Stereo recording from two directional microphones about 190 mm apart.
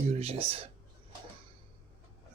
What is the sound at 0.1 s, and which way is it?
Speech, 35° right (ahead or behind).